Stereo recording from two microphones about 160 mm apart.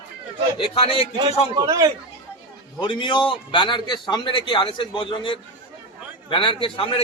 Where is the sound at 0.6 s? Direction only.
35° left (ahead or behind).